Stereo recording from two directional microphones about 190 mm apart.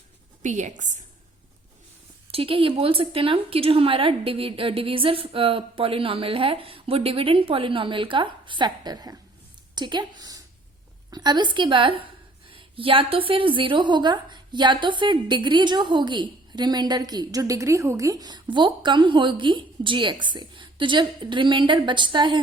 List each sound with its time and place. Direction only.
0.4 s a woman's voice: 40° right (ahead or behind)
2.3 s speech: 30° right (ahead or behind)